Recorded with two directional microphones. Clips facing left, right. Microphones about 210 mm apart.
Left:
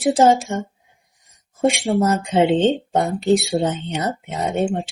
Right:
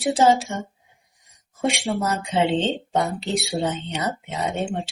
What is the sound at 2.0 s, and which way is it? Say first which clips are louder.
Speech: left 5 dB; 50° left (ahead or behind).